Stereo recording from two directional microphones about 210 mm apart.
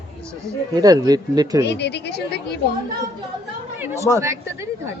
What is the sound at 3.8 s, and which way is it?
Speech, 15° right (ahead or behind).